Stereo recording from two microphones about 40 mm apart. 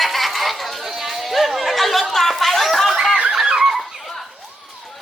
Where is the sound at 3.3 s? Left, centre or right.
Centre.